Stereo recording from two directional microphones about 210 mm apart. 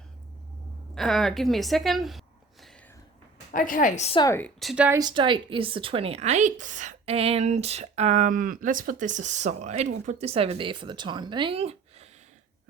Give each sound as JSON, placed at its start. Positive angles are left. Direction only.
{"t": 0.9, "sound": "a woman's voice", "side_deg": 0}
{"t": 3.5, "sound": "a woman's voice", "side_deg": 40}
{"t": 4.2, "sound": "speech", "side_deg": 10}
{"t": 4.9, "sound": "a woman's voice", "side_deg": -20}